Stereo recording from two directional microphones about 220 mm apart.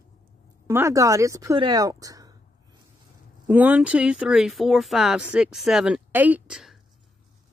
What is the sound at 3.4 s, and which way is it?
Speech, 5° right (ahead or behind).